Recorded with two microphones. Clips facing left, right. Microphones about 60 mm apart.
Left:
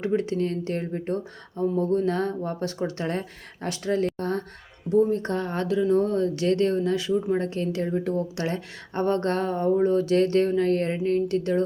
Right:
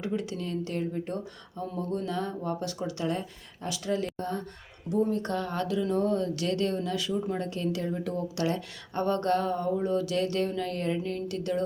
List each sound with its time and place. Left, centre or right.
0.0 s speech: left
4.9 s speech: left
7.4 s speech: left